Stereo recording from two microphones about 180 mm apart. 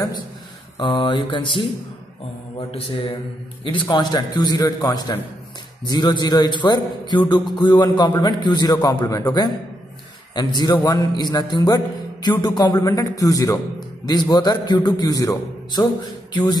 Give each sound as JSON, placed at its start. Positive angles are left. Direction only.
{"t": 0.7, "sound": "a man's voice", "side_deg": 25}
{"t": 2.7, "sound": "a man's voice", "side_deg": 30}